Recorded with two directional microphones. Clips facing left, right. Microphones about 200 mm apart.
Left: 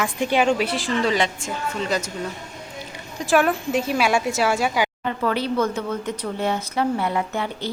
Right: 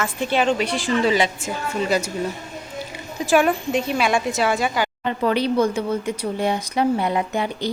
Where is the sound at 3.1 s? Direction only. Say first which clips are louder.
Right 1 dB; centre (ahead or behind).